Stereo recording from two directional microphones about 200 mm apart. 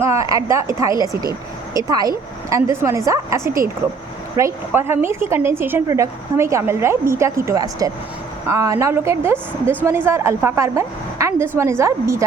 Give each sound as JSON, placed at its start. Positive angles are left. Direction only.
{"t": 0.0, "sound": "a woman's voice", "side_deg": -15}